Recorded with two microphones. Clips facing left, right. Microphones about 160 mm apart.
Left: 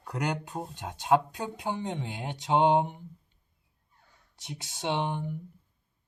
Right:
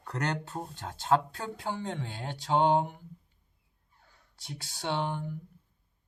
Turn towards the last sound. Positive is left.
turn(degrees=20)  # may be behind; listen again after turning